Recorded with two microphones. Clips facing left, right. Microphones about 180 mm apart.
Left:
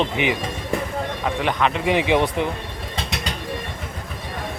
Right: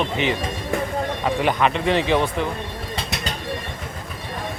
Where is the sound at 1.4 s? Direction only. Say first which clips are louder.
Right 1 dB; 5° right (ahead or behind).